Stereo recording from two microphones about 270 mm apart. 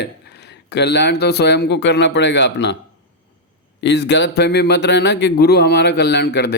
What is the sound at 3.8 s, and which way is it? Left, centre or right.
Speech, left.